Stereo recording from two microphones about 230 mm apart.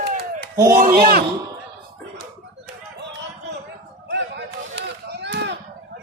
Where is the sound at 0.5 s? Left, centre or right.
Centre.